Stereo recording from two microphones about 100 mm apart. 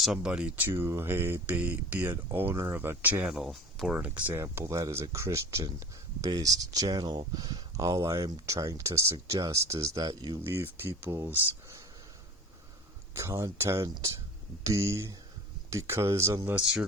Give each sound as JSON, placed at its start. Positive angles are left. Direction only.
{"t": 0.0, "sound": "speech", "side_deg": -5}
{"t": 3.5, "sound": "speech", "side_deg": 5}
{"t": 3.9, "sound": "speech", "side_deg": -15}
{"t": 4.4, "sound": "speech", "side_deg": -25}
{"t": 10.4, "sound": "speech", "side_deg": -25}
{"t": 13.1, "sound": "speech", "side_deg": -25}
{"t": 13.8, "sound": "speech", "side_deg": -45}
{"t": 14.6, "sound": "speech", "side_deg": -30}
{"t": 16.5, "sound": "speech", "side_deg": -10}